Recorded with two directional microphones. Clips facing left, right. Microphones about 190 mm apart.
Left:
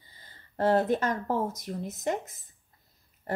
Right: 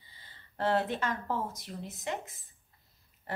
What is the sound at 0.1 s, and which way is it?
Speech, 45° left (ahead or behind).